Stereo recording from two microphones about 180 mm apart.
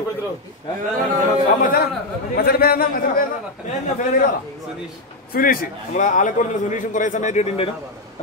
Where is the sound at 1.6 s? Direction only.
50° left (ahead or behind).